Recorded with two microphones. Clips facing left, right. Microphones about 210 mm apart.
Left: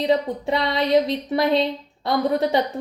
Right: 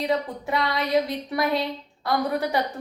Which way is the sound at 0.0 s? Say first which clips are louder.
Left 5 dB; 25° left (ahead or behind).